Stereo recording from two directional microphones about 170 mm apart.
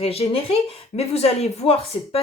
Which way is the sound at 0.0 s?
35° left (ahead or behind).